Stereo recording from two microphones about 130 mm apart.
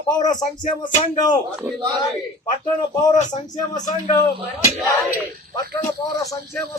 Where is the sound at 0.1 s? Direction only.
30° left (ahead or behind).